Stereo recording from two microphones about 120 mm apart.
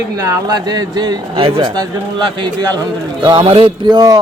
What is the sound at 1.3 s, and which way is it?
Speech, 50° right (ahead or behind).